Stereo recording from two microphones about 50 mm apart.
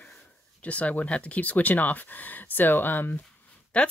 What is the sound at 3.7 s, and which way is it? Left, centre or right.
Speech, left.